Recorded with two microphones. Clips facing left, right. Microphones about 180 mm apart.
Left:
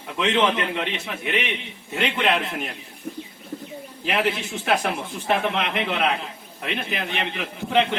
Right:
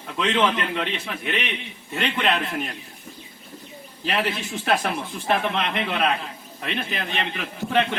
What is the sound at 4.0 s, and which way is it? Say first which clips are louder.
A man's voice: left 2 dB; 15° left (ahead or behind).